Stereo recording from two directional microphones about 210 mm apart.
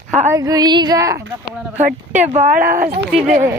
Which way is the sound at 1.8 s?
35° right (ahead or behind).